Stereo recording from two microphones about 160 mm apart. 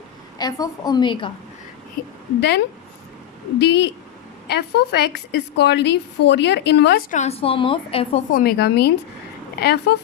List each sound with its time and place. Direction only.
0.3 s a woman's voice: 25° left (ahead or behind)
2.0 s a woman's voice: 65° left (ahead or behind)
3.6 s a woman's voice: 90° left
7.1 s a woman's voice: 45° left (ahead or behind)
8.3 s a woman's voice: 70° left (ahead or behind); by 10.0 s 90° left